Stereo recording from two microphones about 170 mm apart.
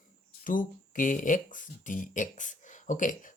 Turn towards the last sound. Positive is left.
turn(degrees=50)  # may be behind; listen again after turning